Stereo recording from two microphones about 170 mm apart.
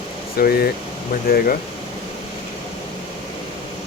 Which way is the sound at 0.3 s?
60° left (ahead or behind).